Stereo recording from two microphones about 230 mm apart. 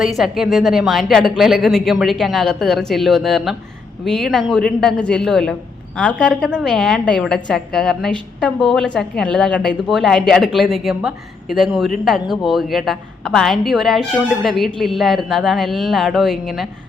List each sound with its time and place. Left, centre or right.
0.0 s a woman's voice: centre